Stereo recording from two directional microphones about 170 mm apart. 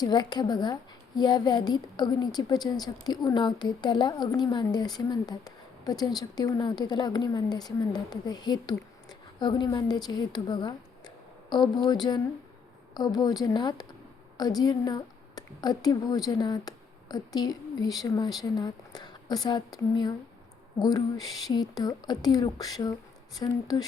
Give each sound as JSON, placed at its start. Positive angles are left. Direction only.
{"t": 0.0, "sound": "a woman's voice", "side_deg": 25}